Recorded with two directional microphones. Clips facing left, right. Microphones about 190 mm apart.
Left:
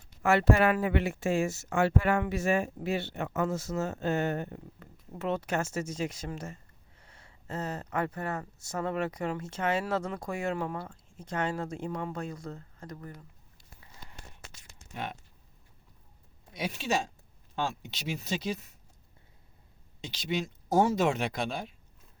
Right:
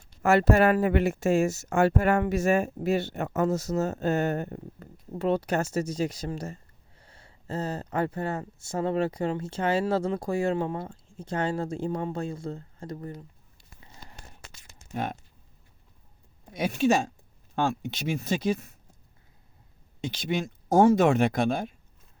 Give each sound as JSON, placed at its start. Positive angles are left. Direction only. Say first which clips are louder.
{"t": 0.2, "sound": "speech", "louder": "right 4 dB", "side_deg": -40}
{"t": 14.9, "sound": "speech", "louder": "right 6 dB", "side_deg": -45}
{"t": 16.5, "sound": "speech", "louder": "right 8 dB", "side_deg": -50}
{"t": 20.0, "sound": "speech", "louder": "right 4 dB", "side_deg": -50}